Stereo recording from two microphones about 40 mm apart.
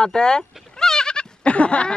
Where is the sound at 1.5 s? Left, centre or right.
Left.